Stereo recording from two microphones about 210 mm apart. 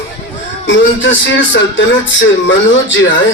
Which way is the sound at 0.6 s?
65° left (ahead or behind).